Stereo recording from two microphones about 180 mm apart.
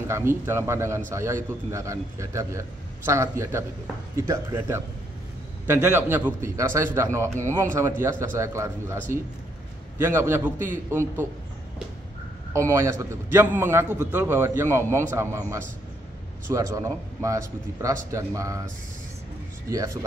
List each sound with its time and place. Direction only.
0.1 s a man's voice: 15° right (ahead or behind)
9.9 s a man's voice: 10° right (ahead or behind)
12.5 s a man's voice: 15° right (ahead or behind)
19.7 s a man's voice: 20° right (ahead or behind)